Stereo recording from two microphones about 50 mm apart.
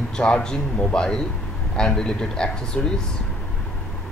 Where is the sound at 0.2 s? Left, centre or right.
Centre.